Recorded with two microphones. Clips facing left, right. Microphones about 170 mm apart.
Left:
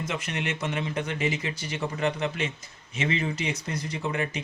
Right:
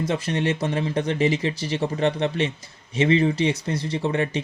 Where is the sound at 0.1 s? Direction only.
30° right (ahead or behind).